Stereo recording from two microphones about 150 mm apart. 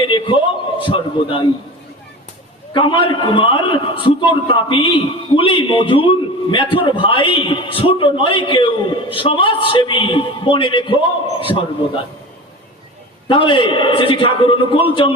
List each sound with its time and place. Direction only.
0.0 s a man's voice: 35° left (ahead or behind)
2.7 s a man's voice: 35° left (ahead or behind)
13.2 s a man's voice: 35° left (ahead or behind)